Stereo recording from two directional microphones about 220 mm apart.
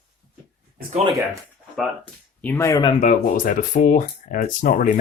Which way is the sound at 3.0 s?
35° left (ahead or behind).